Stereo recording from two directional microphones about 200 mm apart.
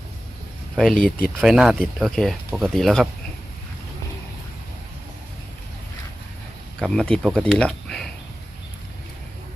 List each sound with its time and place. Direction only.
0.9 s speech: 45° left (ahead or behind)
1.4 s speech: centre (ahead or behind)
6.7 s speech: 5° left (ahead or behind)